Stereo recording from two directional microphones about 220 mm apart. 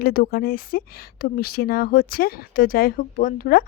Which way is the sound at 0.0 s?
40° left (ahead or behind).